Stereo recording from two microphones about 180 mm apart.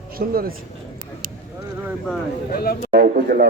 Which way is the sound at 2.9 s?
55° right (ahead or behind).